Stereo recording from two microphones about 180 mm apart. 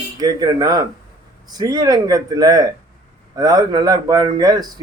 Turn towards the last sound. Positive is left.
turn(degrees=-20)  # may be behind; listen again after turning